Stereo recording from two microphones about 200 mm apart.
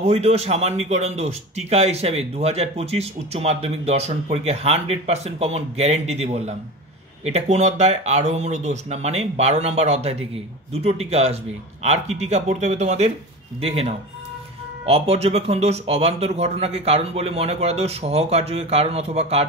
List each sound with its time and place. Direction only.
0.0 s a man's voice: 35° right (ahead or behind)